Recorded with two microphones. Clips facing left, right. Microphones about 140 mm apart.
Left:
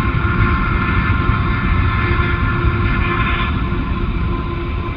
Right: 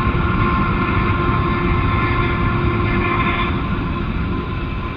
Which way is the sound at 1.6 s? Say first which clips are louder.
Right 1 dB; 35° right (ahead or behind).